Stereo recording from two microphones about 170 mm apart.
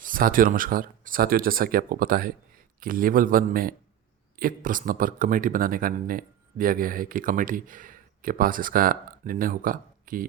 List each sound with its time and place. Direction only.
0.0 s speech: 55° right (ahead or behind)